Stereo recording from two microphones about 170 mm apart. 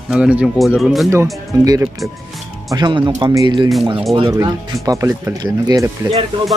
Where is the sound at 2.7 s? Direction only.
25° right (ahead or behind).